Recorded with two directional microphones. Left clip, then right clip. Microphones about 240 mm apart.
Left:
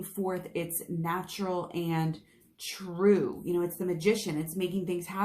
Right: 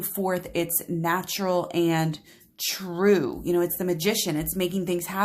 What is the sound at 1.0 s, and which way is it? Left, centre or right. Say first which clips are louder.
Speech: right 7 dB; right.